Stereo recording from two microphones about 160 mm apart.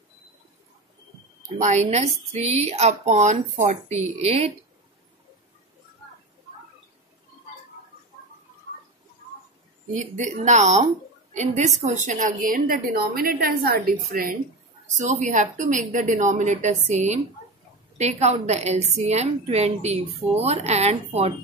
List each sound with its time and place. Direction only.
1.6 s a woman's voice: 45° right (ahead or behind)
9.9 s a woman's voice: 50° right (ahead or behind)
14.9 s a woman's voice: 50° right (ahead or behind)